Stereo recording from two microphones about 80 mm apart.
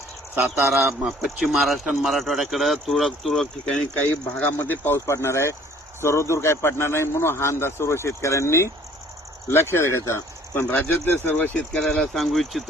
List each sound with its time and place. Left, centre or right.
0.3 s a man's voice: right
1.0 s speech: centre
4.1 s a man's voice: left
11.7 s speech: centre